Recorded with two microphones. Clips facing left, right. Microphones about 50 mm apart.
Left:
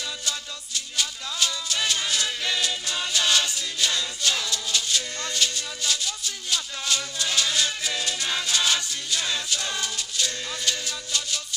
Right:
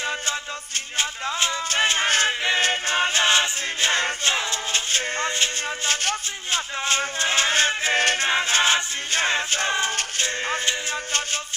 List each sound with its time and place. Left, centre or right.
0.9 s music: right
2.4 s a capella: right
6.5 s choir: right
8.3 s choir: right
9.9 s music: right